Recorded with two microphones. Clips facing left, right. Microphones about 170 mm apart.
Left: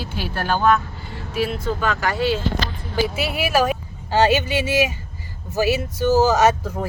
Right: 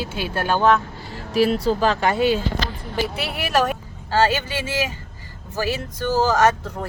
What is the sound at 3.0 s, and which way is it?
Speech, 5° left (ahead or behind).